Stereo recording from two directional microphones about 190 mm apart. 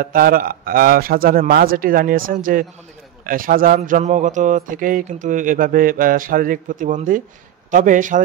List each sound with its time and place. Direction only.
0.0 s a man's voice: 50° right (ahead or behind)